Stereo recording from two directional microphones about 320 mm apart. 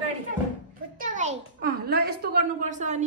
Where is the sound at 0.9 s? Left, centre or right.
Right.